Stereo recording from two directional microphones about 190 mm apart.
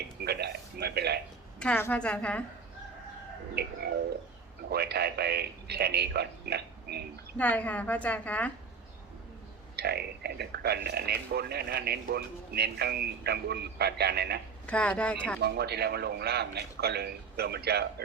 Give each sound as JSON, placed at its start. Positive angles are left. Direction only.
{"t": 0.3, "sound": "a sound", "side_deg": -60}
{"t": 1.5, "sound": "a woman's voice", "side_deg": 10}
{"t": 3.6, "sound": "speech", "side_deg": -55}
{"t": 7.3, "sound": "a woman's voice", "side_deg": 10}
{"t": 9.7, "sound": "speech", "side_deg": -55}
{"t": 14.7, "sound": "a woman's voice", "side_deg": 5}
{"t": 15.4, "sound": "speech", "side_deg": -60}